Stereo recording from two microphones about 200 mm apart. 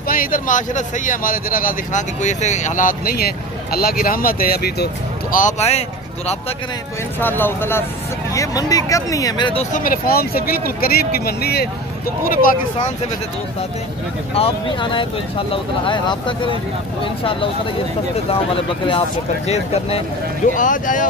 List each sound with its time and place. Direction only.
0.1 s a man's voice: 45° left (ahead or behind)
5.3 s a man's voice: 35° left (ahead or behind)
7.2 s a man's voice: 10° left (ahead or behind); by 12.9 s 45° left (ahead or behind)
14.3 s speech: 25° left (ahead or behind)
18.9 s speech: 30° left (ahead or behind)